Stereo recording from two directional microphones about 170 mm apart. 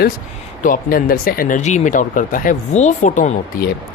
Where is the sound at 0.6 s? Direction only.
55° left (ahead or behind).